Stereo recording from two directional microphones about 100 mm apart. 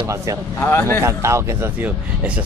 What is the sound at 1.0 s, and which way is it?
Speech, 30° right (ahead or behind).